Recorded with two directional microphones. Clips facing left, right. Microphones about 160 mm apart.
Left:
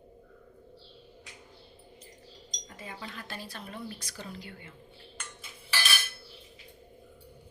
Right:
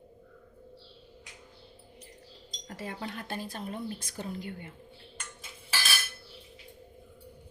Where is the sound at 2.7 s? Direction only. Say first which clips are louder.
Right 5 dB; 75° right (ahead or behind); by 4.7 s 50° right (ahead or behind).